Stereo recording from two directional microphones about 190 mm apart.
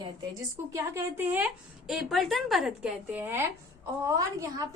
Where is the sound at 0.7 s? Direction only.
15° right (ahead or behind).